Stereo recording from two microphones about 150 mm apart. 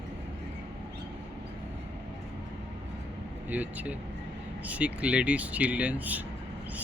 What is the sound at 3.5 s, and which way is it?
Speech, 10° right (ahead or behind).